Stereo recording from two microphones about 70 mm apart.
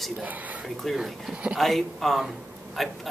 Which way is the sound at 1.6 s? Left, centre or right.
Centre.